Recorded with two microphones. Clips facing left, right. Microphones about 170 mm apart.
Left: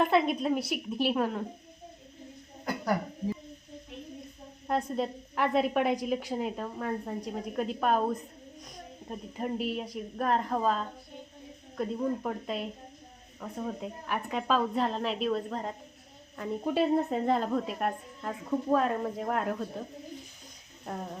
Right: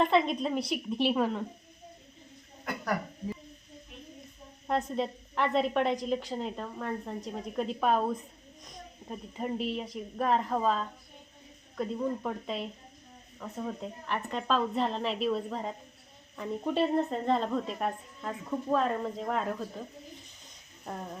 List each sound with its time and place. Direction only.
0.0 s a woman's voice: 5° left (ahead or behind)
2.6 s a sound: 30° left (ahead or behind)
4.7 s a woman's voice: centre (ahead or behind)
11.9 s a woman's voice: 5° left (ahead or behind)
20.9 s a woman's voice: 5° left (ahead or behind)